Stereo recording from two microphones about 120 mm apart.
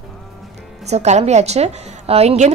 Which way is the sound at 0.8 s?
65° right (ahead or behind).